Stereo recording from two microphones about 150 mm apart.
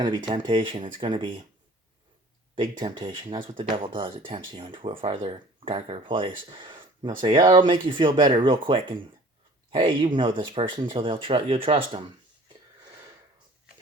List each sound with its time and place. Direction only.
0.0 s speech: 30° right (ahead or behind)
2.6 s speech: 30° right (ahead or behind)